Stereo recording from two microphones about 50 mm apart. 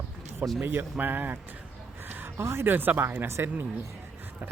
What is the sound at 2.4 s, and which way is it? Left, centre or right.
Speech, right.